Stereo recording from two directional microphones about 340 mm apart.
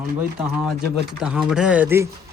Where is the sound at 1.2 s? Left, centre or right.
Centre.